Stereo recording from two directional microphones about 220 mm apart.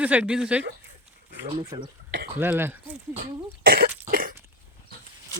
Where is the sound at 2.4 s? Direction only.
10° right (ahead or behind).